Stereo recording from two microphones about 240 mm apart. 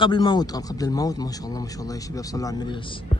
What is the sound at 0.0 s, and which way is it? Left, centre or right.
A man's voice, centre.